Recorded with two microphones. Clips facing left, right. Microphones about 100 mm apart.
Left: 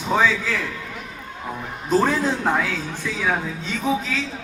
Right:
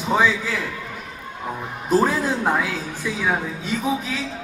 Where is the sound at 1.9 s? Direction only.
10° right (ahead or behind).